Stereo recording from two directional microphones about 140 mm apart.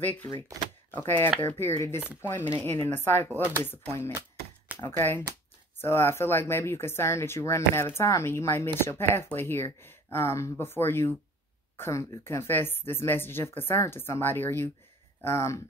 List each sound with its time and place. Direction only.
0.9 s speech: 15° left (ahead or behind)